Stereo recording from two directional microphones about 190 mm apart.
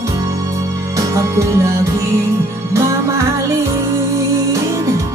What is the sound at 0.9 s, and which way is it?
Music, 15° right (ahead or behind).